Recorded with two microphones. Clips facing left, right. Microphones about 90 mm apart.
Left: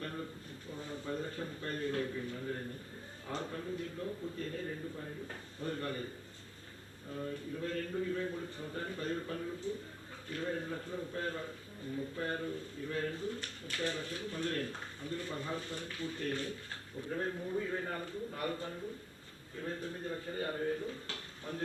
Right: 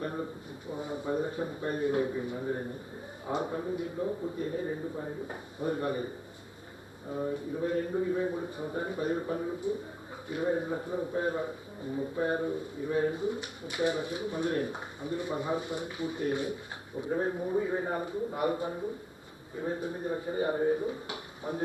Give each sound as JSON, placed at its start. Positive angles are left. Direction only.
{"t": 0.0, "sound": "a sound", "side_deg": -20}
{"t": 0.7, "sound": "a man's voice", "side_deg": -15}
{"t": 7.1, "sound": "a man's voice", "side_deg": -20}